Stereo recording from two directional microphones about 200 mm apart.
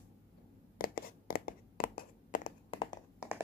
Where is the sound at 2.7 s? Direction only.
25° left (ahead or behind).